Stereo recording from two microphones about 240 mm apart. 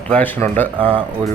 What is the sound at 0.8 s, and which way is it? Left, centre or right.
Speech, right.